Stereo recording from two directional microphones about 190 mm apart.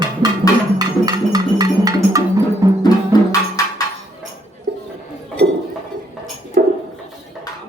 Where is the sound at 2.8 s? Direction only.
20° left (ahead or behind).